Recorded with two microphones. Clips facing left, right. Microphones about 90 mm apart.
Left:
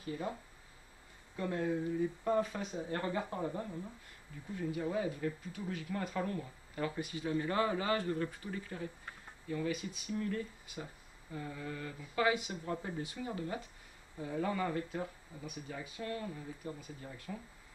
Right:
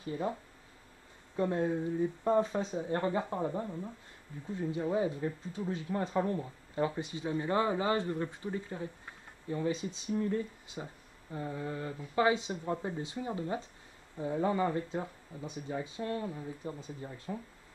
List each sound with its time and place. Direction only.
1.3 s speech: 25° right (ahead or behind)